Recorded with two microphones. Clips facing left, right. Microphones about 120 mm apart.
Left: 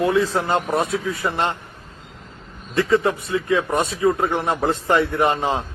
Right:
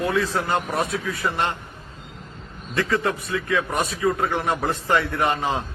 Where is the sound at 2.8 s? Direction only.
20° left (ahead or behind).